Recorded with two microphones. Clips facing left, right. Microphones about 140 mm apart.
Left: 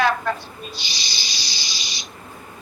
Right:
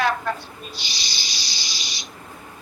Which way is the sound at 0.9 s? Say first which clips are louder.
Left 1 dB; 90° left.